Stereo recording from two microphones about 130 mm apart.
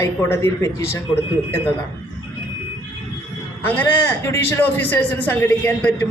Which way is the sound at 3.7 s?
20° left (ahead or behind).